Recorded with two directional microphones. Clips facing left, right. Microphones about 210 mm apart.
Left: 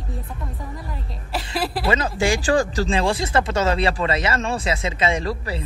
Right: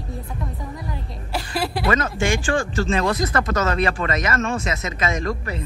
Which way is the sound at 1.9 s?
30° left (ahead or behind).